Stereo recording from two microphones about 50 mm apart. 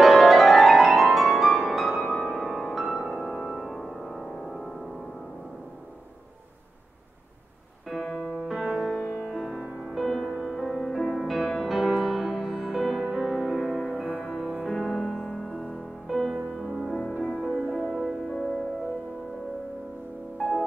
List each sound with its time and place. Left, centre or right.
0.0 s music: centre
8.2 s music: centre
9.0 s music: left
9.3 s music: centre
16.6 s music: centre
17.2 s music: centre
17.7 s music: centre
20.3 s music: centre